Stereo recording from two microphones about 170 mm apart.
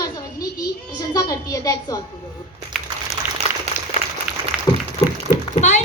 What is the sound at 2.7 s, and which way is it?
Crumpling, centre (ahead or behind).